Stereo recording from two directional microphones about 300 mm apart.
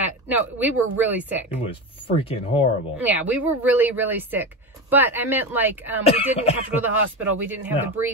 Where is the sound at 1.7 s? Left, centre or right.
Centre.